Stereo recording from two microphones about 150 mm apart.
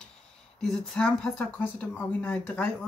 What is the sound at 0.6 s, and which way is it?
Speech, 5° left (ahead or behind).